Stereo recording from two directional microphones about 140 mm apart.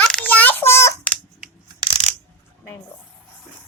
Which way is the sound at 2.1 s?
60° right (ahead or behind).